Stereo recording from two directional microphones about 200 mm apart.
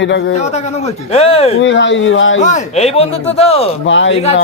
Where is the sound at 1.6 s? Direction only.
65° left (ahead or behind).